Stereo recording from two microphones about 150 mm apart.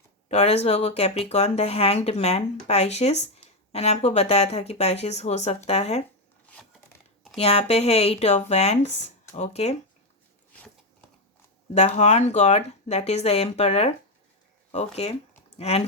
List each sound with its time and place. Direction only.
0.3 s speech: 45° left (ahead or behind)
6.4 s a sound: 10° left (ahead or behind)
7.3 s speech: 40° left (ahead or behind)
11.9 s speech: 50° left (ahead or behind)
15.5 s speech: 45° left (ahead or behind)